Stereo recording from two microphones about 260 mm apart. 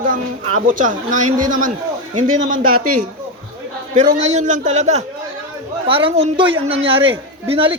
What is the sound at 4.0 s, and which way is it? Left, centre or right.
A man's voice, right.